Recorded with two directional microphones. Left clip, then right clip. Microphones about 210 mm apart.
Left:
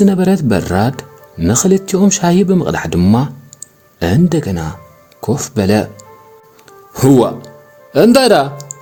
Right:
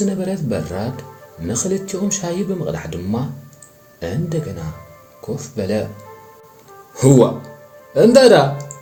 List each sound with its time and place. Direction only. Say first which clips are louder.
0.0 s speech: left 9 dB; 55° left (ahead or behind)
7.9 s speech: left 1 dB; 45° left (ahead or behind)